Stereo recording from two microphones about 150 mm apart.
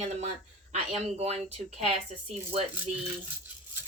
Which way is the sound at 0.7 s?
45° right (ahead or behind).